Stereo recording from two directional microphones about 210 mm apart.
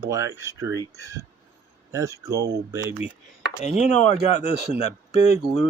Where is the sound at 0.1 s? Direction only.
15° right (ahead or behind).